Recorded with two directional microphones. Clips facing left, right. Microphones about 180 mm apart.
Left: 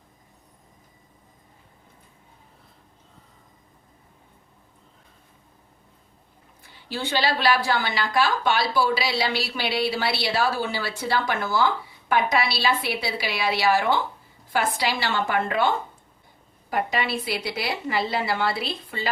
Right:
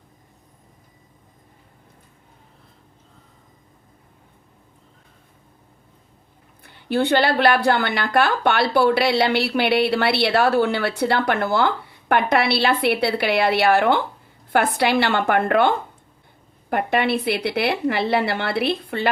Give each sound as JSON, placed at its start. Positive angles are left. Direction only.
{"t": 6.6, "sound": "a woman's voice", "side_deg": -60}